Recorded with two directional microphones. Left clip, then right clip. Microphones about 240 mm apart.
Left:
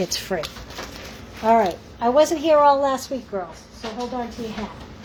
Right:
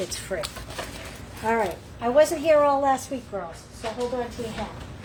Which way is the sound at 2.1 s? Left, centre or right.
Left.